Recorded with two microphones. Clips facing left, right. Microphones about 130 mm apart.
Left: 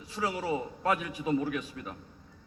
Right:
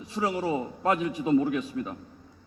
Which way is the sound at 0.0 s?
25° right (ahead or behind).